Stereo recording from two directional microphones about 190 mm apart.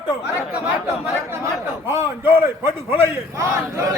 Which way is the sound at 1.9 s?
15° right (ahead or behind).